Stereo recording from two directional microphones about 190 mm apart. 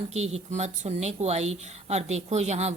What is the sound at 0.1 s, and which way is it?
A woman's voice, 35° right (ahead or behind).